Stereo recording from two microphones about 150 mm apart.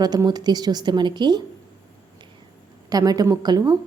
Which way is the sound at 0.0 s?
25° right (ahead or behind).